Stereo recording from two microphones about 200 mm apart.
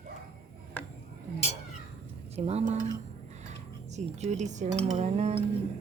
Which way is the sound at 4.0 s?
35° right (ahead or behind).